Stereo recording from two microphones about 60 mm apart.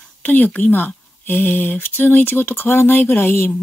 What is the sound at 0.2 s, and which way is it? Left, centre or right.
Speech, left.